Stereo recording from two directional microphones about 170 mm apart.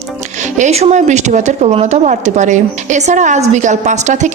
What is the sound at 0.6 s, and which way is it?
Speech, 40° right (ahead or behind).